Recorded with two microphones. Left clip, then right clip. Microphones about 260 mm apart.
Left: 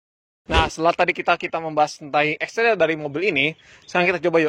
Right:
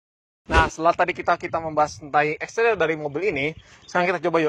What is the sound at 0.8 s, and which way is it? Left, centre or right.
Speech, left.